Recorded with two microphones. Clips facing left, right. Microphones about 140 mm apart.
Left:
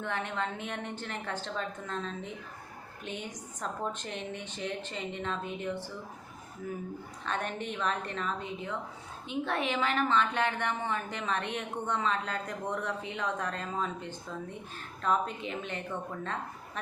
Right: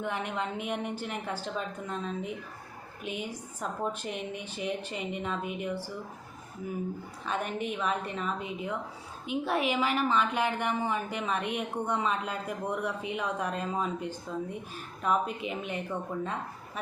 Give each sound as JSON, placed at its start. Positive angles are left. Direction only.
{"t": 0.0, "sound": "a woman's voice", "side_deg": -15}
{"t": 7.3, "sound": "a woman's voice", "side_deg": -10}